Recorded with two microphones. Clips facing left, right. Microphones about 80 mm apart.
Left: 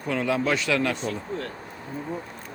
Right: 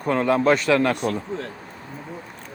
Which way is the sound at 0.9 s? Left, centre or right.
Right.